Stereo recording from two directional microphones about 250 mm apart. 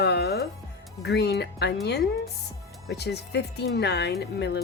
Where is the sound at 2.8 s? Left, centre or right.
Left.